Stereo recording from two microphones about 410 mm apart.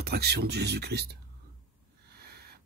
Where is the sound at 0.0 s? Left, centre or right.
Right.